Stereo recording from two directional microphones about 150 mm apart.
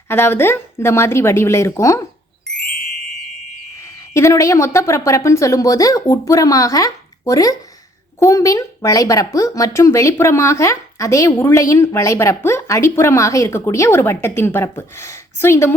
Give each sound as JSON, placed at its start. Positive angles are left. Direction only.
{"t": 0.1, "sound": "speech", "side_deg": 15}
{"t": 3.8, "sound": "speech", "side_deg": 20}